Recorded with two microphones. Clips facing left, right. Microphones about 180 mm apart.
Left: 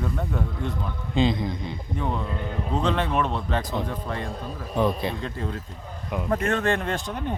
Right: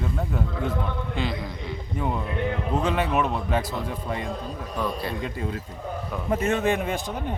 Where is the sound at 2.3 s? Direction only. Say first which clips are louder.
Right 5 dB; 70° right (ahead or behind).